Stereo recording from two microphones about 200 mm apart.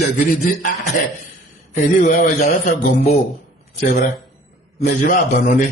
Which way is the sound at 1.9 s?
45° left (ahead or behind).